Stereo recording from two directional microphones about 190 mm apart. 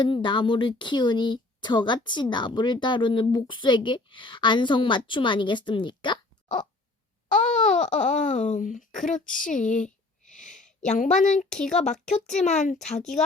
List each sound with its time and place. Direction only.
0.0 s speech: 25° left (ahead or behind)
7.3 s a sound: 5° left (ahead or behind)
7.9 s speech: 40° left (ahead or behind)
10.3 s a sound: 40° left (ahead or behind)
11.6 s speech: 5° left (ahead or behind)
12.5 s speech: 40° left (ahead or behind)